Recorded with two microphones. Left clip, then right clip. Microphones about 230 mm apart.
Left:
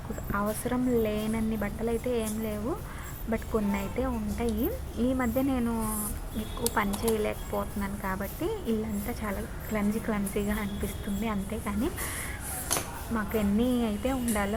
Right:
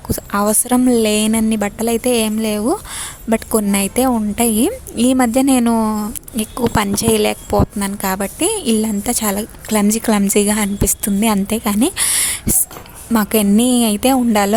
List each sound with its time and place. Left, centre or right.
0.3 s a woman's voice: right